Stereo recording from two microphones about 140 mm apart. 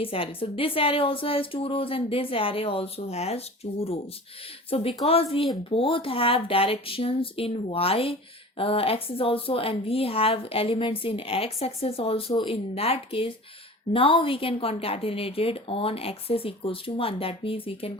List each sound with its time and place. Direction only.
0.0 s a woman's voice: 40° left (ahead or behind)